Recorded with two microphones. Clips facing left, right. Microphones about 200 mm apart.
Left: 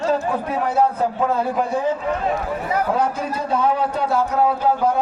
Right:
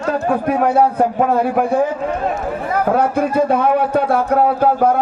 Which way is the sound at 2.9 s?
60° right (ahead or behind).